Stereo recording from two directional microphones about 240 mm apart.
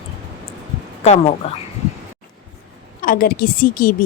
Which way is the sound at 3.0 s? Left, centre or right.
Left.